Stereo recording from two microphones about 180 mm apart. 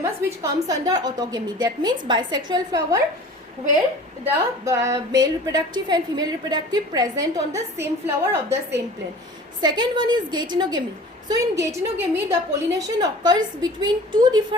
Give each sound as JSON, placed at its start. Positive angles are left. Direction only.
{"t": 0.0, "sound": "a woman's voice", "side_deg": -15}
{"t": 4.6, "sound": "a woman's voice", "side_deg": -15}
{"t": 9.6, "sound": "a woman's voice", "side_deg": -25}